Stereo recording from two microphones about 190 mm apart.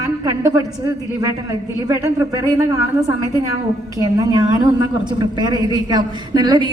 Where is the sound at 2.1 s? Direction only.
20° right (ahead or behind).